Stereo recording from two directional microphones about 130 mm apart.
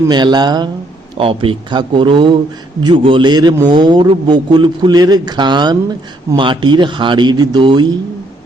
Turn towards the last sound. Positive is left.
turn(degrees=-35)  # may be behind; listen again after turning